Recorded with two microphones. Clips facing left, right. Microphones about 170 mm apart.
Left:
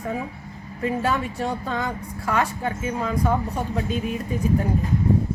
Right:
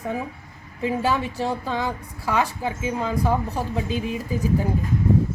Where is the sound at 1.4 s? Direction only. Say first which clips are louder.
Right 1 dB; centre (ahead or behind).